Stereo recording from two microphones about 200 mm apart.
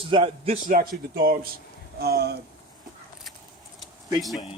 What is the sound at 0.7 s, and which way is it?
Speech, 45° right (ahead or behind).